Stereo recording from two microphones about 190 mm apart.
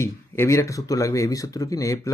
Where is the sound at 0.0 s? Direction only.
15° left (ahead or behind).